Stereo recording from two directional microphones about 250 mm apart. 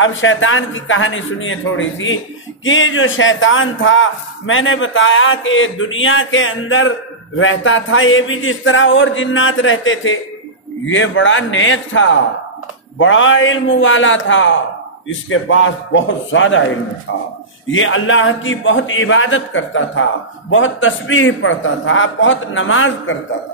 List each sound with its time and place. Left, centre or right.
0.0 s a man's voice: left
17.6 s a man's voice: left